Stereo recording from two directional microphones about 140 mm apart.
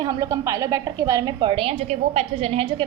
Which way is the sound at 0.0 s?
25° right (ahead or behind).